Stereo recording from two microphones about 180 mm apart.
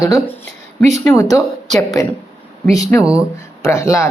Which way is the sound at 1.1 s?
15° left (ahead or behind).